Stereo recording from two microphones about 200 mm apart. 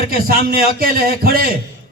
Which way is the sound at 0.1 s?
50° right (ahead or behind).